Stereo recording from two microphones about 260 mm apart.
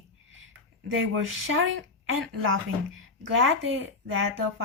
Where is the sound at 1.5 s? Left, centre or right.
Right.